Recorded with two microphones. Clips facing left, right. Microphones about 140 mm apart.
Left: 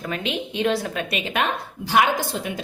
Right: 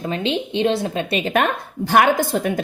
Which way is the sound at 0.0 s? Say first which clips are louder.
Right 5 dB; 30° right (ahead or behind).